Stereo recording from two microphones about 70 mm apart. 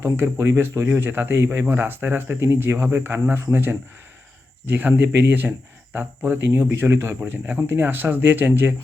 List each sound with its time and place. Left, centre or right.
0.0 s speech: right
7.2 s speech: right